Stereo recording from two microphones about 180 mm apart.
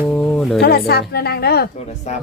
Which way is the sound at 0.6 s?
60° left (ahead or behind).